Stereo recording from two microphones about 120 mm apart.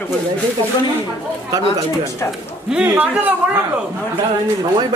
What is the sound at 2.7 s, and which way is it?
Speech, 10° right (ahead or behind).